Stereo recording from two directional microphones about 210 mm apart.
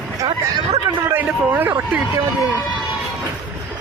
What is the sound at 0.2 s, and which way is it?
Speech, 15° right (ahead or behind).